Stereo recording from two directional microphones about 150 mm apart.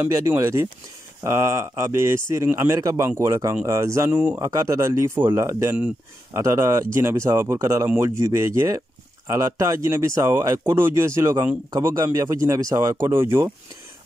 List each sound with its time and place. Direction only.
0.0 s speech: 15° right (ahead or behind)
4.4 s speech: 20° right (ahead or behind)